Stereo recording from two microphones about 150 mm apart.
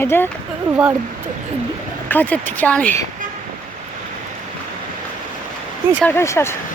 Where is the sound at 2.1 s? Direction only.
10° left (ahead or behind).